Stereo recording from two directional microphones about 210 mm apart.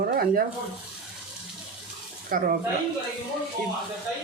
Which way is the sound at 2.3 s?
40° right (ahead or behind).